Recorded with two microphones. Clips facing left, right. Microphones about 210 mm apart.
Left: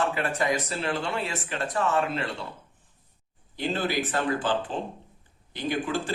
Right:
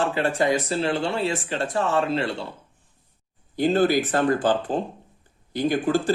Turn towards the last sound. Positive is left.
turn(degrees=-40)  # may be behind; listen again after turning